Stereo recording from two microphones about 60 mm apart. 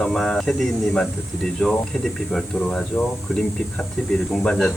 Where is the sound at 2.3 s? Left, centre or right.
Centre.